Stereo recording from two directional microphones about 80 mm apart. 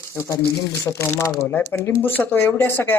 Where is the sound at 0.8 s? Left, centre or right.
Left.